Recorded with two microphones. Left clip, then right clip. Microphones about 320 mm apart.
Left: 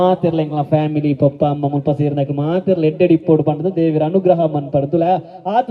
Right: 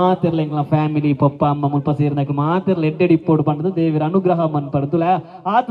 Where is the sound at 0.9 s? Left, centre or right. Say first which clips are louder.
Left 2 dB; centre.